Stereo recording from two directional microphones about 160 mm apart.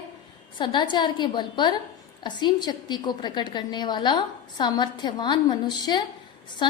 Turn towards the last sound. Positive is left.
turn(degrees=30)  # may be behind; listen again after turning